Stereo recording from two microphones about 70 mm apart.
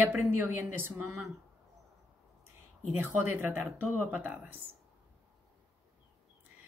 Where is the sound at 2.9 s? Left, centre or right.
Right.